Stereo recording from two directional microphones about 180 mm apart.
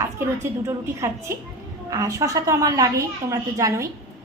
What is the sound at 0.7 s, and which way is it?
A woman's voice, 15° right (ahead or behind).